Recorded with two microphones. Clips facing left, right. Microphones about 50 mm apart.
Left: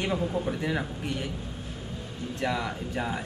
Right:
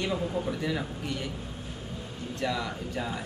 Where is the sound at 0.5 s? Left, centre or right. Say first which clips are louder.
Left 1 dB; left.